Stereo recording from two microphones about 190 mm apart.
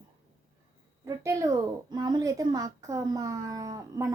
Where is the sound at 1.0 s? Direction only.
15° right (ahead or behind).